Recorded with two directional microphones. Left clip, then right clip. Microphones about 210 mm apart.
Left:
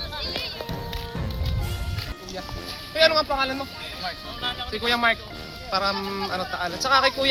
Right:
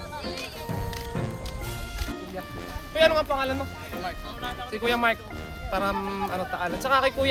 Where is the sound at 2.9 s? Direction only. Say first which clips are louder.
Left 1 dB; 15° right (ahead or behind).